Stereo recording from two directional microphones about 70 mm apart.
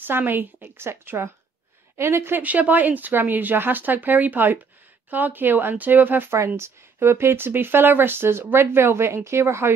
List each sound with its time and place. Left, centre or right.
0.0 s speech: right
6.3 s speech: right